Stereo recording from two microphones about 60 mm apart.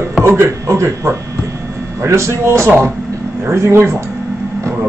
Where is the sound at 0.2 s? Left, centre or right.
Right.